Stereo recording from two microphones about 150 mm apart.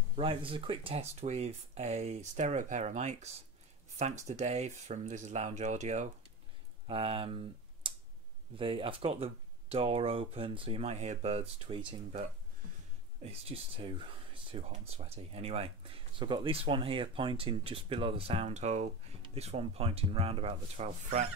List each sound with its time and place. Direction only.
0.1 s speech: 35° right (ahead or behind)
4.3 s speech: 50° right (ahead or behind)
6.9 s speech: 35° right (ahead or behind)
7.8 s tick: 35° right (ahead or behind)
8.5 s speech: 35° right (ahead or behind)
13.2 s speech: 40° right (ahead or behind)